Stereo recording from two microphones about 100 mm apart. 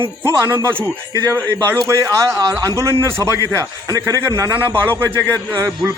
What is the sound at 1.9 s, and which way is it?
A man's voice, 30° right (ahead or behind).